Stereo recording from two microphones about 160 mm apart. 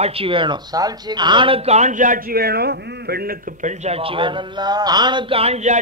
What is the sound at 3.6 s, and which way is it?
A man's voice, 40° right (ahead or behind).